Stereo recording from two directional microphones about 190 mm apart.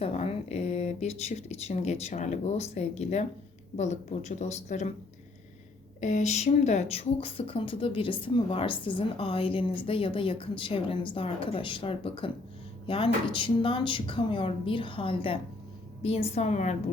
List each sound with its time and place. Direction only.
0.0 s speech: 30° left (ahead or behind)
6.0 s speech: 35° left (ahead or behind)